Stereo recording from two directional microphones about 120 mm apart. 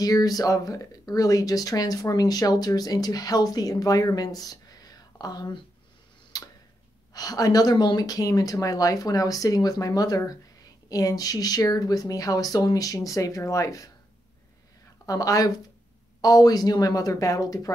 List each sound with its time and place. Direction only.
0.0 s speech: 30° left (ahead or behind)
6.3 s tick-tock: 35° left (ahead or behind)
7.2 s speech: 30° left (ahead or behind)
15.0 s speech: 30° left (ahead or behind)